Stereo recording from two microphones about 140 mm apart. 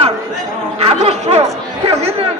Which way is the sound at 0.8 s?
50° right (ahead or behind).